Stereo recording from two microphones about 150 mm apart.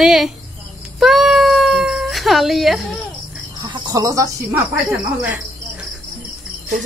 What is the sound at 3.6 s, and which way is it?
Speech, 30° right (ahead or behind).